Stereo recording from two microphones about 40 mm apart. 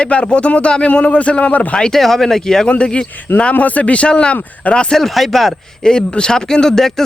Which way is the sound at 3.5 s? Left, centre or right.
Left.